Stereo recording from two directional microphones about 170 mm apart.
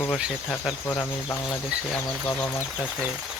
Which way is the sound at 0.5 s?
10° left (ahead or behind).